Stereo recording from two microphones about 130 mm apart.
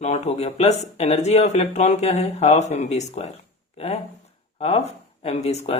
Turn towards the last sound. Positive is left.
turn(degrees=55)  # may be behind; listen again after turning